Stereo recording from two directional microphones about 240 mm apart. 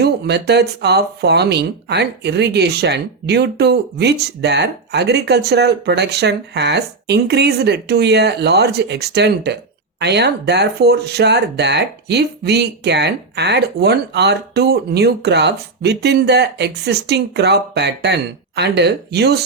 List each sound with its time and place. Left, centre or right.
0.0 s speech: right